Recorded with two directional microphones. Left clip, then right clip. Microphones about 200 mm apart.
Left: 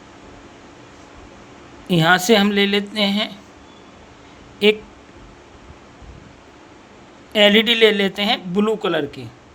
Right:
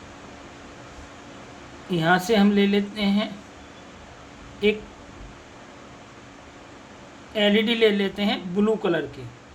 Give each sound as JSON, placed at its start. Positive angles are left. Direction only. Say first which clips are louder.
{"t": 1.9, "sound": "speech", "louder": "left 6 dB", "side_deg": 55}
{"t": 4.6, "sound": "speech", "louder": "left 7 dB", "side_deg": 55}
{"t": 7.3, "sound": "speech", "louder": "left 7 dB", "side_deg": 50}